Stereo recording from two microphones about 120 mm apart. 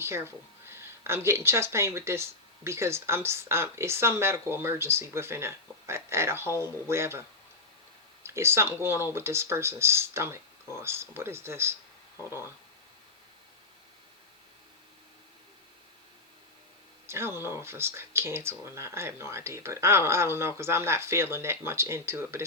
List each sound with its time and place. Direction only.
0.0 s speech: 20° right (ahead or behind)
17.1 s speech: 20° right (ahead or behind)